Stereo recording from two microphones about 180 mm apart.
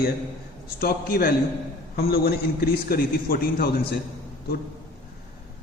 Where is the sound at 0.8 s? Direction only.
55° left (ahead or behind).